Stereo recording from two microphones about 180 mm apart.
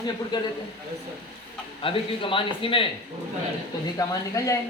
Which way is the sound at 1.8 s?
30° left (ahead or behind).